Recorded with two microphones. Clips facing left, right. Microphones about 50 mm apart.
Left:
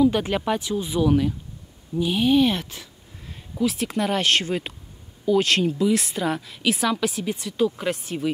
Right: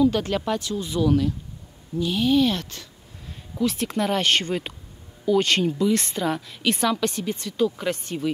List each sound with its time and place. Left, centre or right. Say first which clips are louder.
0.0 s a woman's voice: left 1 dB; centre